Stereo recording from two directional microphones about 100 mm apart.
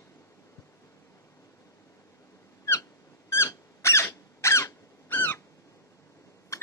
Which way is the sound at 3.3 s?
25° left (ahead or behind).